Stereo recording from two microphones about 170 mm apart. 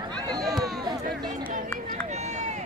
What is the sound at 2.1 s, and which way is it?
Run, 45° right (ahead or behind).